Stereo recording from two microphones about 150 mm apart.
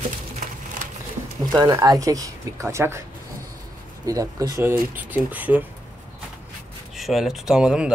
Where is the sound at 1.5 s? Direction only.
25° right (ahead or behind).